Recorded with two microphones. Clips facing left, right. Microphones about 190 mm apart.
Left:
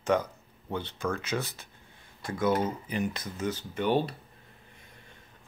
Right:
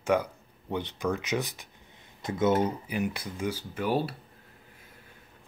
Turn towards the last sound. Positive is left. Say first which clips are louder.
# even
turn(degrees=-5)  # may be behind; listen again after turning